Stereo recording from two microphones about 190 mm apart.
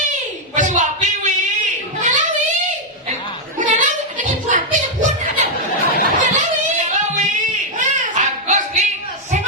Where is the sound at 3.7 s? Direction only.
45° right (ahead or behind).